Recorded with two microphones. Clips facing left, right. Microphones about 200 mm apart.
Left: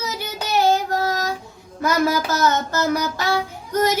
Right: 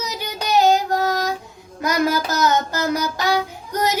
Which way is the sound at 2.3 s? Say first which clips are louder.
Even; 15° right (ahead or behind).